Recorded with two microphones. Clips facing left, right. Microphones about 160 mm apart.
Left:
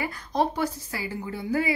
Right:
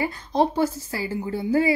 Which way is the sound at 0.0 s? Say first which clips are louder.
Right 4 dB; 30° right (ahead or behind).